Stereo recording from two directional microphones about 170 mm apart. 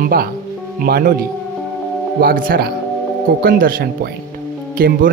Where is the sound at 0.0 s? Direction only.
60° right (ahead or behind).